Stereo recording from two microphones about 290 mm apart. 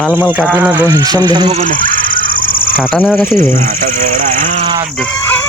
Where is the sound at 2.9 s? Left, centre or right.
Centre.